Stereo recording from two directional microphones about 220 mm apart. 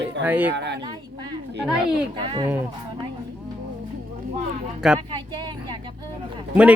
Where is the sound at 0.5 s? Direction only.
50° right (ahead or behind).